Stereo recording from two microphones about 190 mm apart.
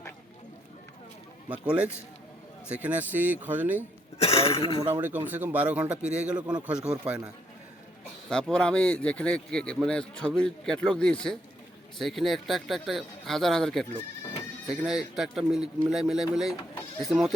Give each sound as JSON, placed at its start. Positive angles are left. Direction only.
{"t": 1.5, "sound": "speech", "side_deg": -5}
{"t": 4.2, "sound": "speech", "side_deg": 30}
{"t": 4.9, "sound": "speech", "side_deg": -10}
{"t": 8.3, "sound": "a man's voice", "side_deg": 5}